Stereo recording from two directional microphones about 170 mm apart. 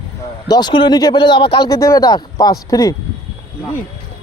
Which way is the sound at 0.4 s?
25° left (ahead or behind).